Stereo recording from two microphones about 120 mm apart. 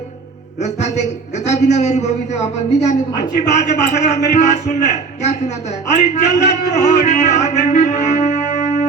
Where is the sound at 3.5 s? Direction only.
75° left (ahead or behind).